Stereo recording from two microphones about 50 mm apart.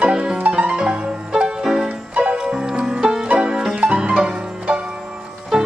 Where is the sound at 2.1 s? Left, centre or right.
Right.